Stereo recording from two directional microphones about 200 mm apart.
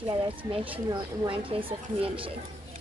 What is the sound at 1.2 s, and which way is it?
A woman's voice, 25° right (ahead or behind).